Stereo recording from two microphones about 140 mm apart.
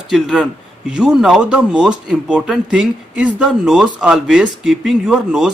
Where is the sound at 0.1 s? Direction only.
5° right (ahead or behind).